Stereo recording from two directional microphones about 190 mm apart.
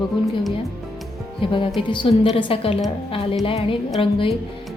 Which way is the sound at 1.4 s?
25° left (ahead or behind).